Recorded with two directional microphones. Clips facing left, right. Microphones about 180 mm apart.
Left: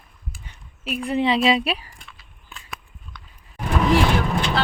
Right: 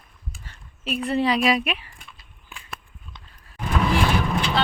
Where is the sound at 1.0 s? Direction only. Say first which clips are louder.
Left 2 dB; 20° left (ahead or behind).